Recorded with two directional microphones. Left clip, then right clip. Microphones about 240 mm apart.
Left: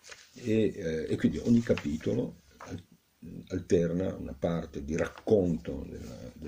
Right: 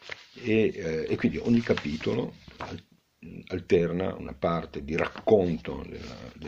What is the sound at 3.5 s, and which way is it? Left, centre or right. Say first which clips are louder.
Speech: right 3 dB; centre.